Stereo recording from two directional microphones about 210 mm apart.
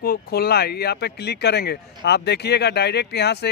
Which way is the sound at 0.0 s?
45° left (ahead or behind).